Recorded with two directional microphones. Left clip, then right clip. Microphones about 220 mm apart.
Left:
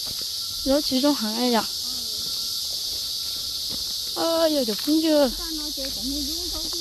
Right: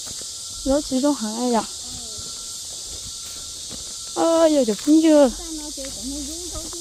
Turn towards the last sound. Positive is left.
turn(degrees=-30)  # may be behind; listen again after turning